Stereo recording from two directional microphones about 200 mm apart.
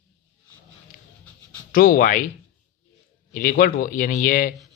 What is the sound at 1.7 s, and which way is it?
Speech, 45° left (ahead or behind).